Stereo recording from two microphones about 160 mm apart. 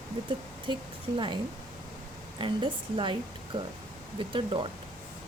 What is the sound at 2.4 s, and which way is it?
A woman's voice, 30° right (ahead or behind).